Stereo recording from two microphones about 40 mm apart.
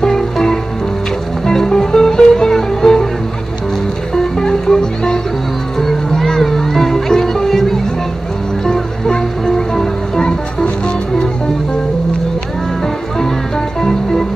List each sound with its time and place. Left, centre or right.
0.0 s music: centre
4.1 s music: centre
13.7 s music: centre